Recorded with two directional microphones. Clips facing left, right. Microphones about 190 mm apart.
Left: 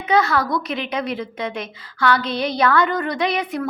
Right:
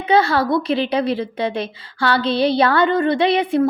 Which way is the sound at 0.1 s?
30° right (ahead or behind).